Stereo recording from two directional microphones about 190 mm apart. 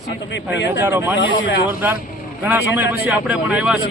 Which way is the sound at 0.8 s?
10° right (ahead or behind).